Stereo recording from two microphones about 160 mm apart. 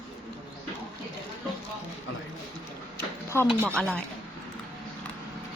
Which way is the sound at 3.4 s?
5° right (ahead or behind).